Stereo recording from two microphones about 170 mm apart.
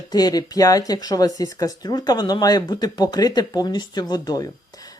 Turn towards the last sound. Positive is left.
turn(degrees=20)  # may be behind; listen again after turning